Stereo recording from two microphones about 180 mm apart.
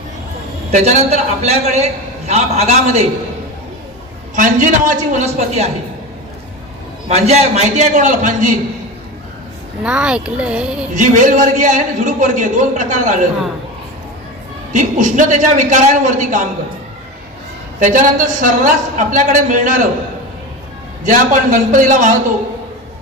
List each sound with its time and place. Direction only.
0.7 s a man's voice: 40° right (ahead or behind)
4.4 s a man's voice: 45° right (ahead or behind)
7.1 s a man's voice: 35° right (ahead or behind)
9.8 s a child's voice: 5° right (ahead or behind)
10.9 s a man's voice: 45° right (ahead or behind)
14.7 s a man's voice: 45° right (ahead or behind)
17.7 s a man's voice: 45° right (ahead or behind)
21.0 s a man's voice: 45° right (ahead or behind)